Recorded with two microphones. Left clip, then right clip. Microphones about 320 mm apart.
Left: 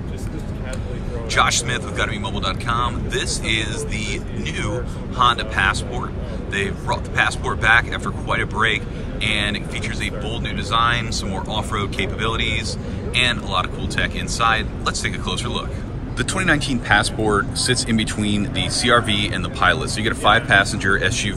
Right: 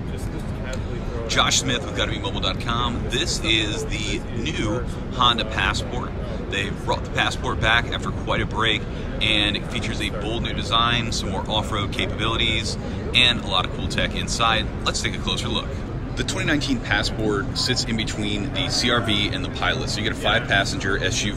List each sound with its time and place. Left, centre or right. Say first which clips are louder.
1.3 s speech: left 2 dB; centre